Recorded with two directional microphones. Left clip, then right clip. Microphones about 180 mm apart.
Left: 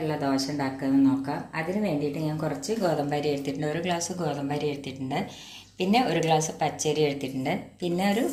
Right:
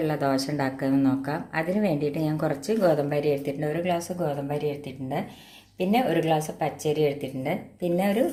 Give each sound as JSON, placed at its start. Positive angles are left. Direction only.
{"t": 0.0, "sound": "speech", "side_deg": -50}
{"t": 5.8, "sound": "a woman's voice", "side_deg": -30}